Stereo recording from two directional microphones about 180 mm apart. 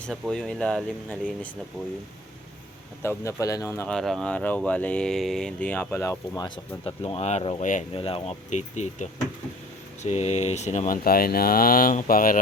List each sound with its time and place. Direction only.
0.0 s speech: 5° left (ahead or behind)
3.0 s speech: 15° left (ahead or behind)
6.8 s speech: 35° left (ahead or behind)
7.9 s speech: 30° left (ahead or behind); by 12.4 s 50° left (ahead or behind)